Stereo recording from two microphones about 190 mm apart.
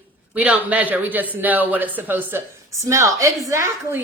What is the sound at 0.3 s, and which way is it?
A woman's voice, 5° right (ahead or behind).